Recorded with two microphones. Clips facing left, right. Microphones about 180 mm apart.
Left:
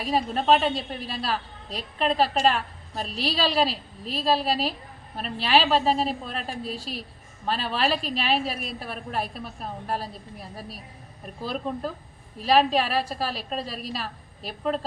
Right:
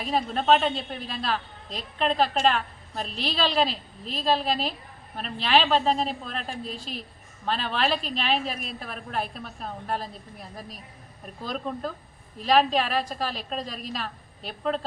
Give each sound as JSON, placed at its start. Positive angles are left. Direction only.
{"t": 0.1, "sound": "a woman's voice", "side_deg": 10}
{"t": 2.0, "sound": "a woman's voice", "side_deg": 5}
{"t": 3.7, "sound": "a woman's voice", "side_deg": 35}
{"t": 4.2, "sound": "a woman's voice", "side_deg": 5}
{"t": 6.6, "sound": "a woman's voice", "side_deg": 35}
{"t": 7.4, "sound": "a woman's voice", "side_deg": 5}